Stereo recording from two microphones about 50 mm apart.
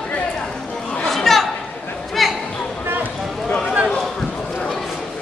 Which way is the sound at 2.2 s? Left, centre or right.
Centre.